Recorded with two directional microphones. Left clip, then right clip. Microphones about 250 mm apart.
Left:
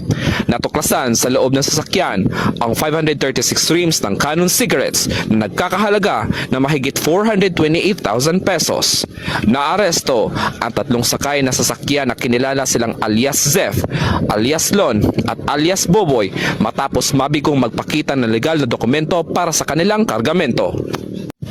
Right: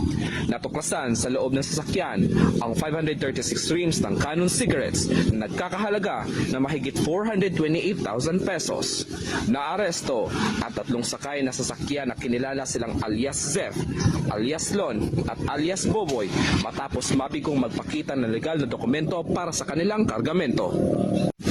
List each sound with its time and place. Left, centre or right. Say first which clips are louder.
0.9 s speech: left 11 dB; left